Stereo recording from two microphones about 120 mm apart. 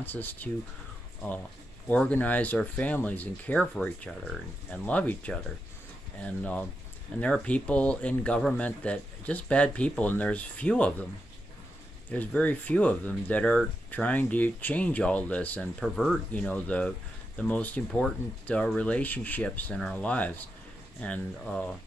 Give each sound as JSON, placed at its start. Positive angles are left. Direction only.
{"t": 0.0, "sound": "speech", "side_deg": 15}
{"t": 1.9, "sound": "speech", "side_deg": 10}
{"t": 12.4, "sound": "speech", "side_deg": 15}
{"t": 15.8, "sound": "speech", "side_deg": 0}
{"t": 16.3, "sound": "speech", "side_deg": 10}